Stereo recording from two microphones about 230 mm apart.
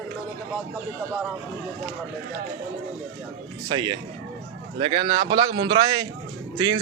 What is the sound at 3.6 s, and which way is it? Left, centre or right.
Speech, centre.